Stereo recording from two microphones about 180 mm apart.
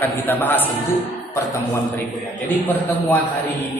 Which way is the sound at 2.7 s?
10° left (ahead or behind).